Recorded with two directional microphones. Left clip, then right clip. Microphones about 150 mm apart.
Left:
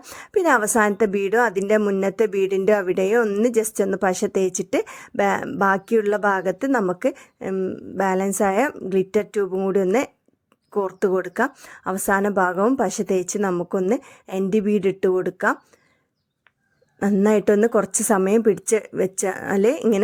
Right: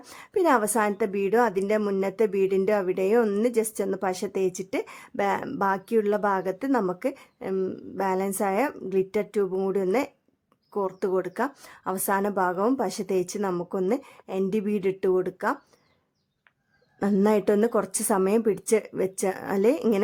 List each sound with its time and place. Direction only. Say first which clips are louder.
0.0 s a woman's voice: left 4 dB; 30° left (ahead or behind)
7.9 s a woman's voice: left 6 dB; 30° left (ahead or behind)
17.2 s speech: left 5 dB; 20° left (ahead or behind)